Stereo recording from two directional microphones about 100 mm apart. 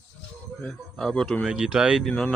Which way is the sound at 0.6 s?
5° left (ahead or behind).